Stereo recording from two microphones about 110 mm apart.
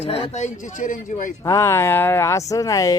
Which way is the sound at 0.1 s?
75° left (ahead or behind).